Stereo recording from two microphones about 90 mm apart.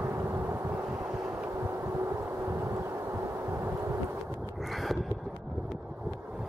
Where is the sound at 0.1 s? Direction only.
30° right (ahead or behind).